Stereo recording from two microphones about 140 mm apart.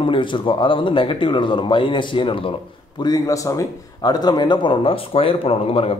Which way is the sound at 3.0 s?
25° left (ahead or behind).